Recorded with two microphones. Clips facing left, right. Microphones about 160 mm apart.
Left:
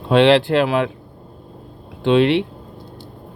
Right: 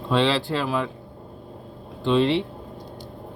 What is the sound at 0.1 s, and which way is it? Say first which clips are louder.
Speech: left 9 dB; 65° left (ahead or behind).